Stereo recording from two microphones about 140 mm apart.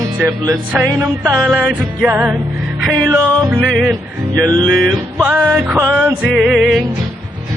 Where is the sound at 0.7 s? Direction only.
10° right (ahead or behind).